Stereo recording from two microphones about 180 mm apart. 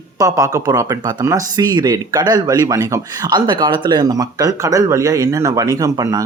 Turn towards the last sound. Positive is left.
turn(degrees=-20)  # may be behind; listen again after turning